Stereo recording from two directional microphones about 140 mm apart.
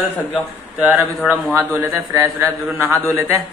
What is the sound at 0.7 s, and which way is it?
A man's voice, 10° right (ahead or behind).